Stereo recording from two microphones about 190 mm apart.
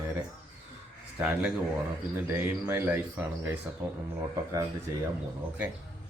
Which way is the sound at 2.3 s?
10° right (ahead or behind).